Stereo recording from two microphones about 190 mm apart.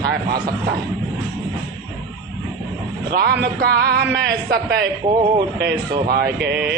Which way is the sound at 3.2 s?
55° right (ahead or behind).